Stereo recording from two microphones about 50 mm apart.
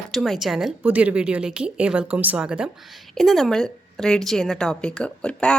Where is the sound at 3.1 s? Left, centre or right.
Centre.